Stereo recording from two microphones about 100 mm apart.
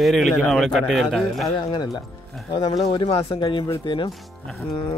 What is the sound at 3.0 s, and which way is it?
Speech, 70° left (ahead or behind).